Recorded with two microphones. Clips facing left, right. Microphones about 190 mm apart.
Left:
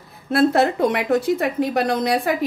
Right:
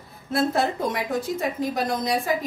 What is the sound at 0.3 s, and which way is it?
A woman's voice, 70° left (ahead or behind).